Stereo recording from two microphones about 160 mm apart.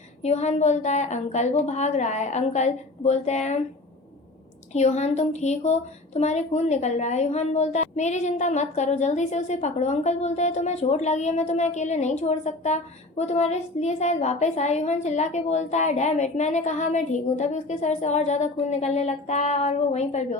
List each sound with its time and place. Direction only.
0.2 s a woman's voice: 45° left (ahead or behind)
4.7 s a woman's voice: 45° left (ahead or behind)